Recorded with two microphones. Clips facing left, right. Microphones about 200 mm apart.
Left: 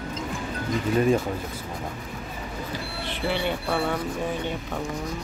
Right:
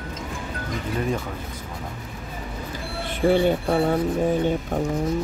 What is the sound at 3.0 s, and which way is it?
Speech, 45° right (ahead or behind).